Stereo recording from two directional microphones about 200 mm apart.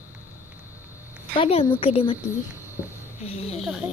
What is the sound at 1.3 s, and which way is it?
Speech, 30° left (ahead or behind).